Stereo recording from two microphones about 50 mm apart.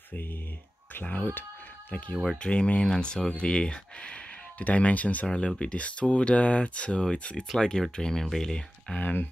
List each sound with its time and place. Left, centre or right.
1.0 s speech: left
5.2 s speech: centre
8.9 s speech: left